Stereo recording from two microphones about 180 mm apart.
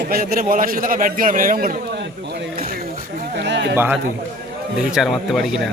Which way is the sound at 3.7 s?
10° right (ahead or behind).